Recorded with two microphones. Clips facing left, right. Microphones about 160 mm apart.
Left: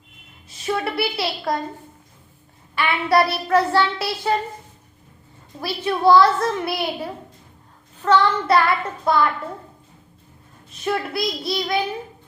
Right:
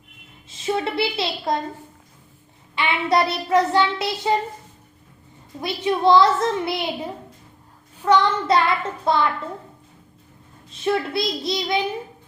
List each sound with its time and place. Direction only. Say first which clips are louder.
0.4 s a woman's voice: right 1 dB; 25° right (ahead or behind)
2.7 s child singing: left 2 dB; 20° right (ahead or behind)
5.5 s child singing: right 1 dB; 20° right (ahead or behind)
10.7 s child singing: right 2 dB; 25° right (ahead or behind)